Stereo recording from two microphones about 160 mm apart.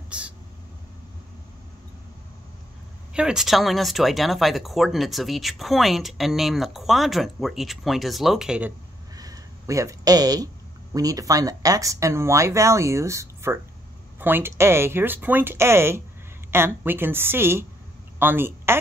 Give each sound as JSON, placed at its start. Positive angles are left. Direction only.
{"t": 0.1, "sound": "a sound", "side_deg": -5}
{"t": 3.1, "sound": "speech", "side_deg": -5}
{"t": 9.1, "sound": "speech", "side_deg": -20}